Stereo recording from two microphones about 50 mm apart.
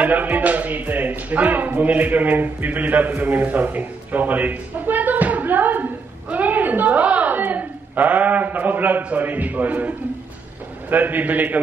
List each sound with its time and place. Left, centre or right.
0.0 s a man's voice: right